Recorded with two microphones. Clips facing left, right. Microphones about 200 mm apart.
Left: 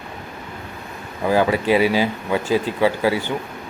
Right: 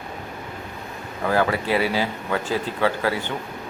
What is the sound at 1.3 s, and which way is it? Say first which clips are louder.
Speech: left 4 dB; 15° left (ahead or behind).